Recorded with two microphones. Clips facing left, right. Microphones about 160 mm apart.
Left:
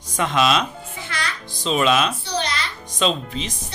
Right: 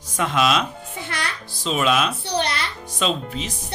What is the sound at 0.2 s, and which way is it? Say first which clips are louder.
Speech: left 1 dB; 5° right (ahead or behind).